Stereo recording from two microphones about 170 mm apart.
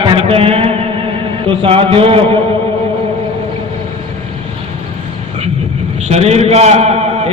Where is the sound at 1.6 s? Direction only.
35° right (ahead or behind).